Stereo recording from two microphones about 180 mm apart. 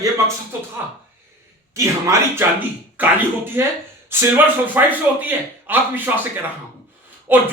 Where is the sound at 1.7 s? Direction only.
15° right (ahead or behind).